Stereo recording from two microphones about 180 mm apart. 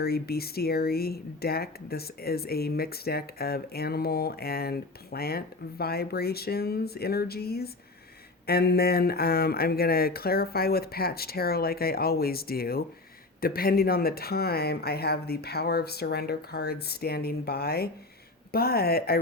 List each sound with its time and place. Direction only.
0.0 s speech: 60° left (ahead or behind)